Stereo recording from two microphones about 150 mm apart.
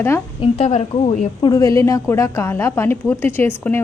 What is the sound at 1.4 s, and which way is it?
A woman's voice, 25° left (ahead or behind).